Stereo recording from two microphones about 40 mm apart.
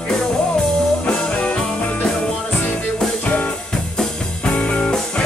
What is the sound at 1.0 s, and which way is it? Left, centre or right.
Music, left.